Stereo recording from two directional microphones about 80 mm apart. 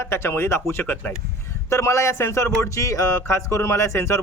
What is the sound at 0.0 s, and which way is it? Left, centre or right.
Speech, left.